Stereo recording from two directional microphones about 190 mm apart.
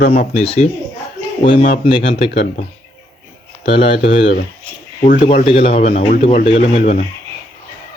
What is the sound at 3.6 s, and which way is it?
Speech, 30° left (ahead or behind).